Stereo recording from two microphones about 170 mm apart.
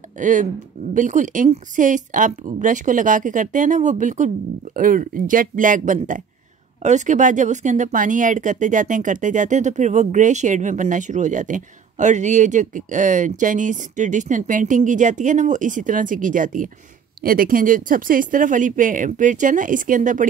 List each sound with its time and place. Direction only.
0.2 s speech: 50° right (ahead or behind)